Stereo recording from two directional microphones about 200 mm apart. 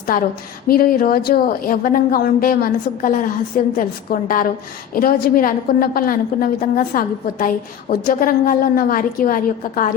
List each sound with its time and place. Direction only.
0.1 s a woman's voice: 45° left (ahead or behind)